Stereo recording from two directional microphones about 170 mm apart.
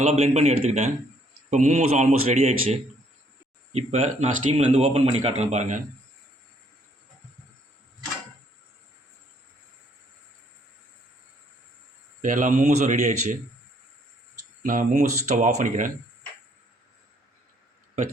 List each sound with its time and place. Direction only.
0.0 s speech: 35° right (ahead or behind)
12.2 s speech: 50° right (ahead or behind)
14.6 s speech: 50° right (ahead or behind)